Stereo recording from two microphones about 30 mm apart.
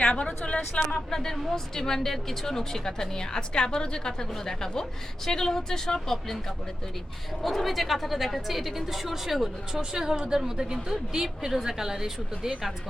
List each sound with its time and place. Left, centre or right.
0.0 s a woman's voice: left
1.1 s a woman's voice: centre
7.4 s a woman's voice: centre
9.9 s a woman's voice: centre